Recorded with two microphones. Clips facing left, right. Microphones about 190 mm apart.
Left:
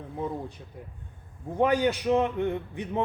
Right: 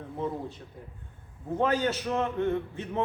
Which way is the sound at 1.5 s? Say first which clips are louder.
Left 3 dB; 15° left (ahead or behind).